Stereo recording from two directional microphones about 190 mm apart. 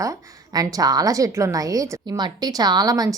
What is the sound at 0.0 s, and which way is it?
A woman's voice, 20° right (ahead or behind).